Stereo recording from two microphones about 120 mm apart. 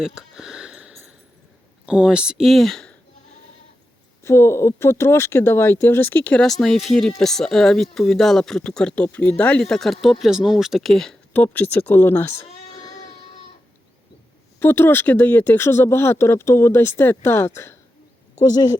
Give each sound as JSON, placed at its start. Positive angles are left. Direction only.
{"t": 0.0, "sound": "a sound", "side_deg": -5}
{"t": 1.9, "sound": "speech", "side_deg": -10}
{"t": 4.2, "sound": "speech", "side_deg": 20}
{"t": 11.3, "sound": "speech", "side_deg": 15}
{"t": 12.7, "sound": "baby cry", "side_deg": 25}
{"t": 14.6, "sound": "speech", "side_deg": 20}
{"t": 18.3, "sound": "speech", "side_deg": 35}